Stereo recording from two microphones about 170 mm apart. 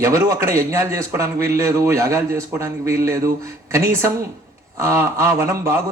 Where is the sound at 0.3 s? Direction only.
20° right (ahead or behind).